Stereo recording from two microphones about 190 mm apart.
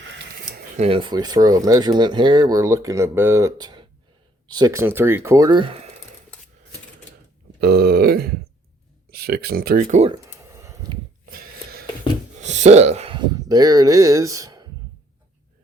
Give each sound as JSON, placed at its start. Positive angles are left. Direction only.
{"t": 0.8, "sound": "speech", "side_deg": -30}
{"t": 7.6, "sound": "grunt", "side_deg": -55}
{"t": 9.0, "sound": "speech", "side_deg": -55}
{"t": 10.2, "sound": "a sound", "side_deg": -15}
{"t": 11.3, "sound": "a sound", "side_deg": -50}
{"t": 12.4, "sound": "speech", "side_deg": -35}